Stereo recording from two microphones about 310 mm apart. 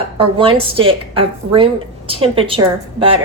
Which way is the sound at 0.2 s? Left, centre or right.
Centre.